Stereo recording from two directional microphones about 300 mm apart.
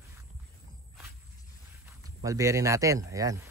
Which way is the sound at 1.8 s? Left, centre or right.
Centre.